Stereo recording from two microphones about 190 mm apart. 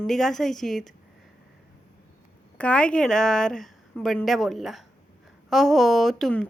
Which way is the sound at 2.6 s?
5° left (ahead or behind).